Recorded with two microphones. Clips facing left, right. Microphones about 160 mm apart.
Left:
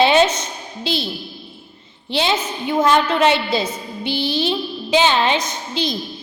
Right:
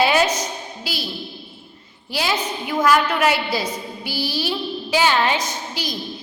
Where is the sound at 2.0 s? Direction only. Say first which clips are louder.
Left 3 dB; 25° left (ahead or behind).